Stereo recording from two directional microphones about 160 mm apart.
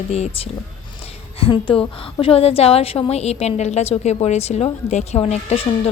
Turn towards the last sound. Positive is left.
turn(degrees=40)  # may be behind; listen again after turning